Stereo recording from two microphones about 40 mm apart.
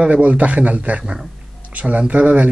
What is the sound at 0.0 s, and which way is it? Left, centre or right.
A man's voice, right.